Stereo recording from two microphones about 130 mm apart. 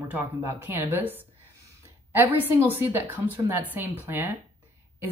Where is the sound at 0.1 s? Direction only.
15° right (ahead or behind).